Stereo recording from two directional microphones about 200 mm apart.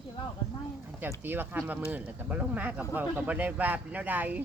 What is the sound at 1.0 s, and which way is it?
Speech, 10° right (ahead or behind).